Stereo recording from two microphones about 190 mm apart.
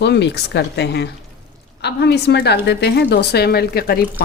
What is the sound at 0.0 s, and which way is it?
A woman's voice, 65° left (ahead or behind).